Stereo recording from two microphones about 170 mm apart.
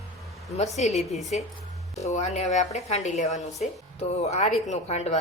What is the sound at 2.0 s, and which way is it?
Speech, 40° left (ahead or behind).